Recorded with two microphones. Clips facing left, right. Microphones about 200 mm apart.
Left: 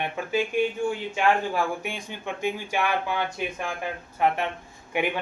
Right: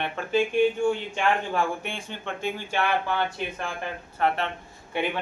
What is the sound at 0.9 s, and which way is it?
Speech, 5° left (ahead or behind).